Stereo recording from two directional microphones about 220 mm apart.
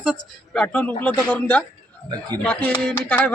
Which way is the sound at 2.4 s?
5° left (ahead or behind).